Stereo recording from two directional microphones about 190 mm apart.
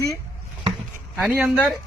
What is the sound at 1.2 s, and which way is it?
Speech, 5° right (ahead or behind).